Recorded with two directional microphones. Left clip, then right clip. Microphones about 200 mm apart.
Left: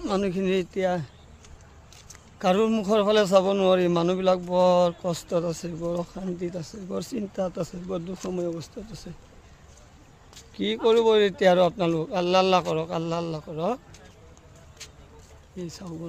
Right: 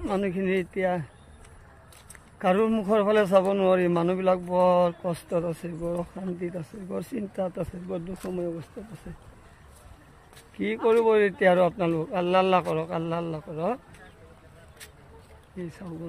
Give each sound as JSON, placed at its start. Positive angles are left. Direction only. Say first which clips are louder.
{"t": 0.0, "sound": "speech", "louder": "left 1 dB", "side_deg": 20}
{"t": 2.3, "sound": "a man's voice", "louder": "left 1 dB", "side_deg": 15}
{"t": 10.6, "sound": "a man's voice", "louder": "left 1 dB", "side_deg": 20}